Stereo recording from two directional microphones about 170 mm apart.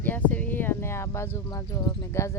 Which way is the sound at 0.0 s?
10° left (ahead or behind).